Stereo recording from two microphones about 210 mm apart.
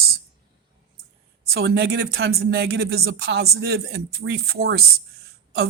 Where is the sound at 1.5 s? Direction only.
50° right (ahead or behind).